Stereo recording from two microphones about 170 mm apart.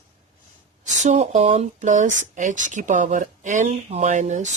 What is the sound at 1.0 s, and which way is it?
Speech, 40° right (ahead or behind).